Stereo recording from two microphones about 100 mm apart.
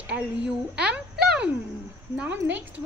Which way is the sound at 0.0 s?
10° right (ahead or behind).